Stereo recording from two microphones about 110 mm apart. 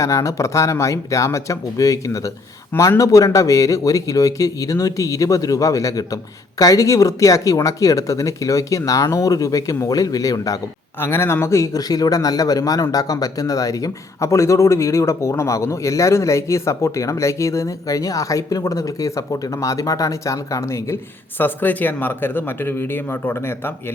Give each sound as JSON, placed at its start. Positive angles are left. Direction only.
{"t": 0.0, "sound": "speech", "side_deg": 30}
{"t": 11.0, "sound": "speech", "side_deg": 20}